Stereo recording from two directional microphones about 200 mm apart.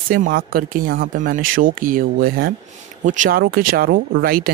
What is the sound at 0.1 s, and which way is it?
Speech, 45° right (ahead or behind).